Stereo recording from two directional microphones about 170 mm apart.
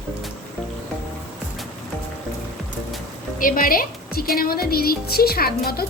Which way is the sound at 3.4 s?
55° left (ahead or behind).